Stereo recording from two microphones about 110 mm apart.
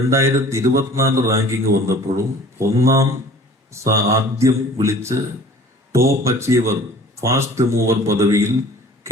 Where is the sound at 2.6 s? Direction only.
25° right (ahead or behind).